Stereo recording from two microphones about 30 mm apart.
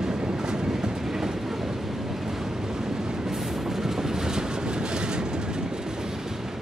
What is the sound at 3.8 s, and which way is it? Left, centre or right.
Train, centre.